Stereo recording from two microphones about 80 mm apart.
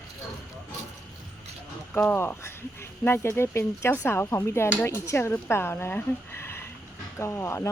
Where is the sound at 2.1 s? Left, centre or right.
Left.